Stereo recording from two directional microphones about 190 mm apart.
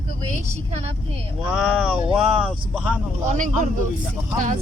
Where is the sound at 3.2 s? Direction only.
40° right (ahead or behind).